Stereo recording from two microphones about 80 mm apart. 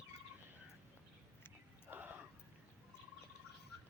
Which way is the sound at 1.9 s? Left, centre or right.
Right.